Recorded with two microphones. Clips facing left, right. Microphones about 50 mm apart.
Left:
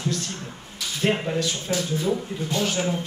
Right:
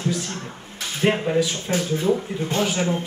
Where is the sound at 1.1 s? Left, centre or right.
Centre.